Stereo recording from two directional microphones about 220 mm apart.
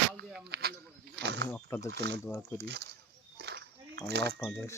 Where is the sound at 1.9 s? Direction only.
50° right (ahead or behind).